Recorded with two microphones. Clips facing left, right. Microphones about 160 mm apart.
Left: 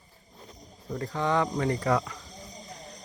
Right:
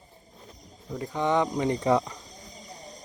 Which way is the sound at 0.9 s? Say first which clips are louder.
Right 2 dB; 15° right (ahead or behind).